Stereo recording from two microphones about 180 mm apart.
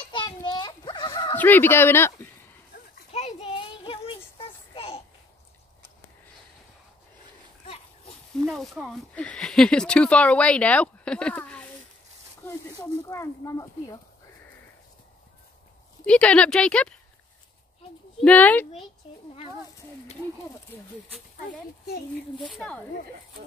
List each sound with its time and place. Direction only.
0.1 s a sound: 25° left (ahead or behind)
1.3 s speech: 10° left (ahead or behind)
3.1 s a sound: 35° left (ahead or behind)
8.5 s speech: centre (ahead or behind); by 13.7 s 20° left (ahead or behind)
16.1 s speech: 5° left (ahead or behind)
18.2 s speech: 10° left (ahead or behind)
21.5 s speech: 55° left (ahead or behind)
22.4 s speech: 5° left (ahead or behind)